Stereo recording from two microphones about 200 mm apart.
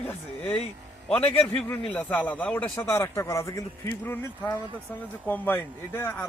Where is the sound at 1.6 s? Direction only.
5° left (ahead or behind).